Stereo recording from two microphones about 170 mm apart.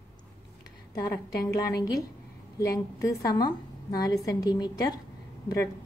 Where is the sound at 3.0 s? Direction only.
20° left (ahead or behind).